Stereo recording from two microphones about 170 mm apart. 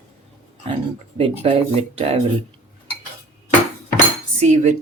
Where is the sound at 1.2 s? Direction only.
35° right (ahead or behind).